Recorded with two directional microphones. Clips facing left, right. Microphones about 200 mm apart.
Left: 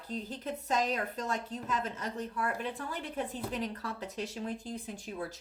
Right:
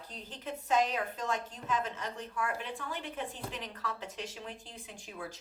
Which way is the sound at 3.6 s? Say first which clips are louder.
Left 4 dB; 35° left (ahead or behind).